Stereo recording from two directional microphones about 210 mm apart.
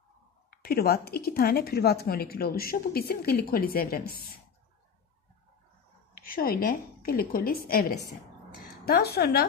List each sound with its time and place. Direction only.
0.5 s a woman's voice: 45° left (ahead or behind)
6.1 s a woman's voice: 45° left (ahead or behind)